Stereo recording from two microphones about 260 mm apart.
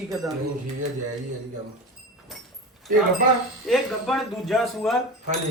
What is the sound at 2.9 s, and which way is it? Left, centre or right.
Speech, right.